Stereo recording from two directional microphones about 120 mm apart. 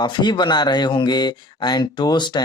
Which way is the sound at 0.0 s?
40° left (ahead or behind).